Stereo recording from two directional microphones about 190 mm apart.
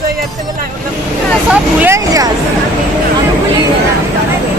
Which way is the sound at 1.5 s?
10° right (ahead or behind).